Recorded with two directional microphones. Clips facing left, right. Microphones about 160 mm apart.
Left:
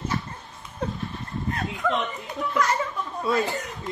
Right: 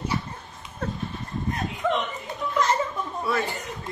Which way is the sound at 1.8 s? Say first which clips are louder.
Right 1 dB; 20° right (ahead or behind).